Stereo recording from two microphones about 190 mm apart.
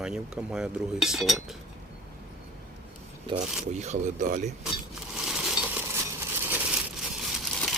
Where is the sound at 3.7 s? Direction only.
35° right (ahead or behind).